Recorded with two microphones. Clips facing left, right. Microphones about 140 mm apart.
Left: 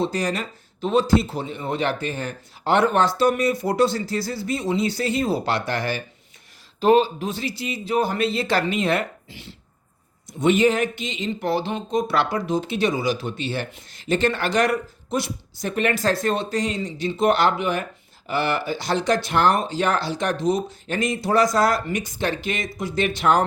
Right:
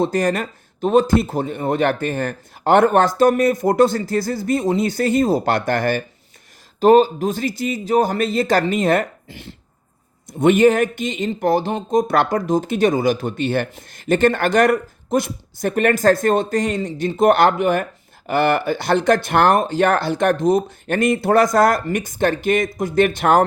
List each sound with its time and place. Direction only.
0.0 s speech: 50° right (ahead or behind)